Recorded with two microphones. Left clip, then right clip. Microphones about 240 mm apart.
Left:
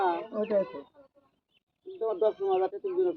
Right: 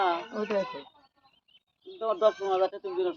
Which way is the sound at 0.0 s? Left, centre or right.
Centre.